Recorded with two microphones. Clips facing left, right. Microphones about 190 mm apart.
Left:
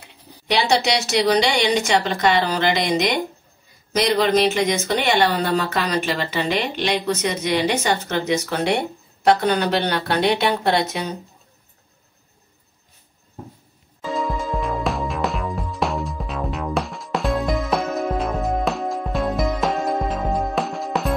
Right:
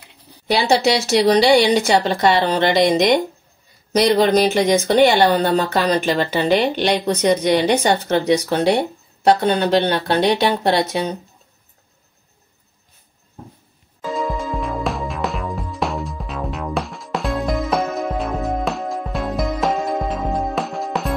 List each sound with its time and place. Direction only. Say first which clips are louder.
1.2 s speech: right 6 dB; 35° right (ahead or behind)
4.2 s speech: right 3 dB; 35° right (ahead or behind)
14.0 s music: right 1 dB; centre (ahead or behind)